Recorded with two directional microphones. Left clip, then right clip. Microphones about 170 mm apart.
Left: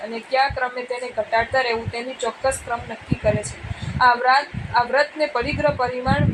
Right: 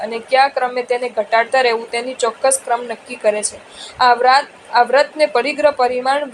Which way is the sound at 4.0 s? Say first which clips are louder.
Right 4 dB; 40° right (ahead or behind).